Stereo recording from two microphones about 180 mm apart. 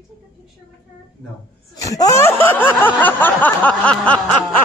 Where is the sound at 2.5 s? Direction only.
10° left (ahead or behind).